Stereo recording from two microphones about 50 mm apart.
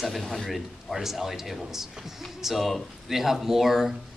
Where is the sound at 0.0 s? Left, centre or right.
Centre.